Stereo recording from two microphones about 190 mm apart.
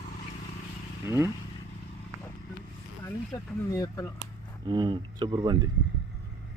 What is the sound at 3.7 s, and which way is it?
Speech, 20° left (ahead or behind).